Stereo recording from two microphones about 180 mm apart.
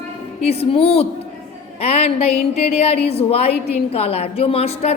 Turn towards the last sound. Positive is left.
turn(degrees=35)  # may be behind; listen again after turning